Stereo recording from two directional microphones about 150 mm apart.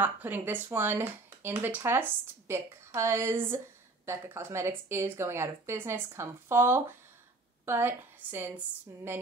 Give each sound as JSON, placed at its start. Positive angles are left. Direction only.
{"t": 0.0, "sound": "speech", "side_deg": -10}